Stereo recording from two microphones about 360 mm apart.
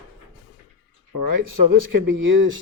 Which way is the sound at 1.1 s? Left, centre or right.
Right.